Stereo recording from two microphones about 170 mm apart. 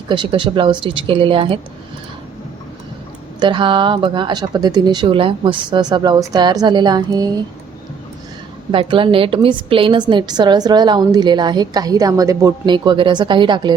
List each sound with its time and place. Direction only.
0.1 s speech: 30° right (ahead or behind)
3.4 s a woman's voice: 30° right (ahead or behind)
8.7 s a woman's voice: 30° right (ahead or behind)